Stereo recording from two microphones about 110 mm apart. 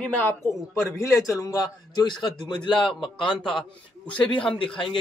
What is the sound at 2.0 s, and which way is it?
Speech, 45° left (ahead or behind).